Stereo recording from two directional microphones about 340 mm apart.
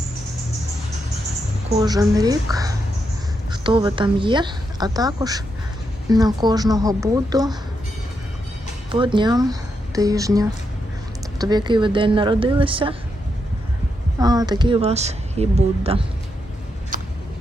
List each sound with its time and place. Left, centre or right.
1.8 s a woman's voice: centre
8.9 s a woman's voice: centre
14.2 s a woman's voice: centre
16.9 s a sound: right